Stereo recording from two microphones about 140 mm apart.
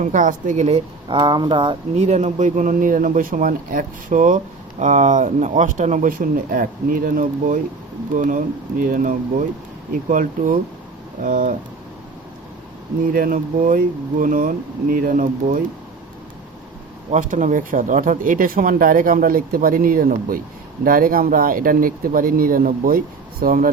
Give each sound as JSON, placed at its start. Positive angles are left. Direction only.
{"t": 0.0, "sound": "speech", "side_deg": -65}
{"t": 1.0, "sound": "speech", "side_deg": -30}
{"t": 2.0, "sound": "speech", "side_deg": -55}
{"t": 13.1, "sound": "speech", "side_deg": -80}
{"t": 17.1, "sound": "speech", "side_deg": -65}